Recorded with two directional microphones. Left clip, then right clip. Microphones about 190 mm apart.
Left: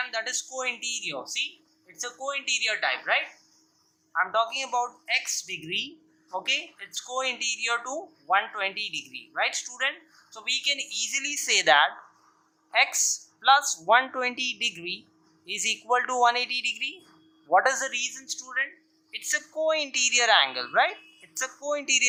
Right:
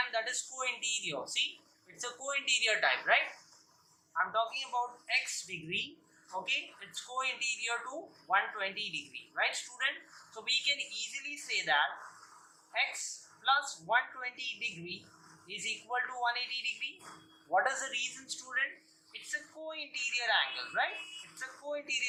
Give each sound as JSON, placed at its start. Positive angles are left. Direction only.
{"t": 0.1, "sound": "speech", "side_deg": 35}
{"t": 4.1, "sound": "speech", "side_deg": 40}
{"t": 13.0, "sound": "speech", "side_deg": 55}
{"t": 19.3, "sound": "a woman's voice", "side_deg": 55}